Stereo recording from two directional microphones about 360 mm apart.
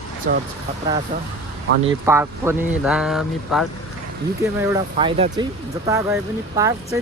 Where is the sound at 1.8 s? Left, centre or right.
Centre.